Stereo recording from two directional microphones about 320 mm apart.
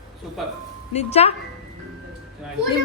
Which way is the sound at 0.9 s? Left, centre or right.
Centre.